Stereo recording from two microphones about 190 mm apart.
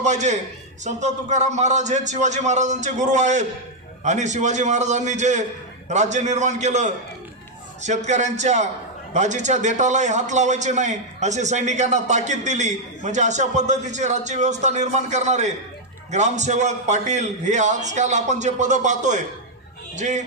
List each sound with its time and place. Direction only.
0.0 s a man's voice: 40° right (ahead or behind)